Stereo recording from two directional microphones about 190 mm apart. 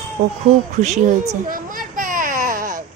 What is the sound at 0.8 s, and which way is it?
Baby cry, 40° right (ahead or behind).